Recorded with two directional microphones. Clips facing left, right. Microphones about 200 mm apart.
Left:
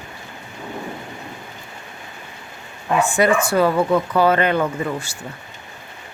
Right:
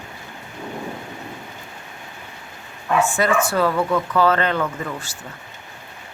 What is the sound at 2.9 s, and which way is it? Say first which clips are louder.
Speech: left 2 dB; 15° left (ahead or behind).